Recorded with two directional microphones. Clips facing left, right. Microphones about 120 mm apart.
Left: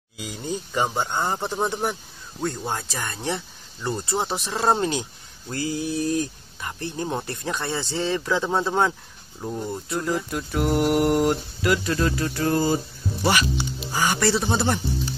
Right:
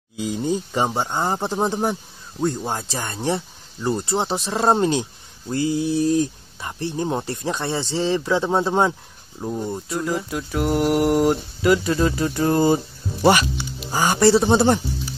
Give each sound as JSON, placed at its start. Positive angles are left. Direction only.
{"t": 1.0, "sound": "speech", "side_deg": -25}
{"t": 2.4, "sound": "speech", "side_deg": -15}
{"t": 2.9, "sound": "speech", "side_deg": -25}
{"t": 9.4, "sound": "speech", "side_deg": -10}
{"t": 9.7, "sound": "speech", "side_deg": 0}